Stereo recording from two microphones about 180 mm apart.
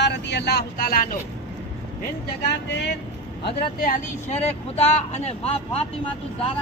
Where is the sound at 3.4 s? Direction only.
55° left (ahead or behind).